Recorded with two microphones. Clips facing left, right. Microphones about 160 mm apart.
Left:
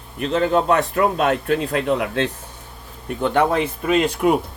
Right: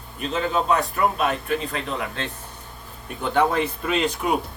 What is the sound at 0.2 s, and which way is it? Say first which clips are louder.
Speech: left 6 dB; 65° left (ahead or behind).